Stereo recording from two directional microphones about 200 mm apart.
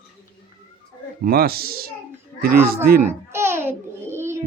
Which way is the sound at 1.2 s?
50° right (ahead or behind).